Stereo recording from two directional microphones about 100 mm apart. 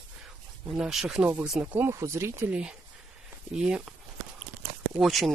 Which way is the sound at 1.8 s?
25° right (ahead or behind).